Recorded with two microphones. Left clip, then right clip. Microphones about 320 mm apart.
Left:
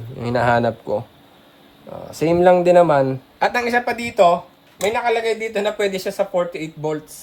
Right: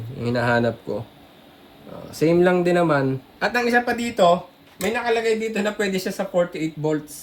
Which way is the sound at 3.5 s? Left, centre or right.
Left.